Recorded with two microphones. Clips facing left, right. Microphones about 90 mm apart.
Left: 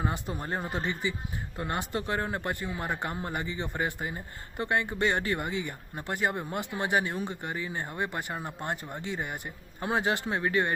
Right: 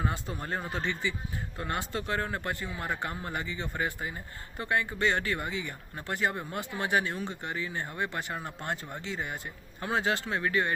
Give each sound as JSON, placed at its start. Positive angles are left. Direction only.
{"t": 0.0, "sound": "speech", "side_deg": 15}